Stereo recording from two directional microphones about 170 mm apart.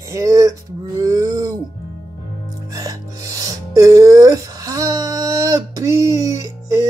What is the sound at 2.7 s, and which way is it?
Music, 20° right (ahead or behind).